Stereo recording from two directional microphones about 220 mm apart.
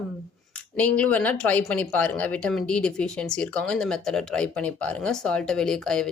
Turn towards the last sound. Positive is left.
turn(degrees=5)  # may be behind; listen again after turning